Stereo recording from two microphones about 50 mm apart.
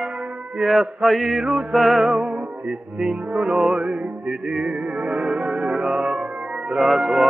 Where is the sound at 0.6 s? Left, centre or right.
Centre.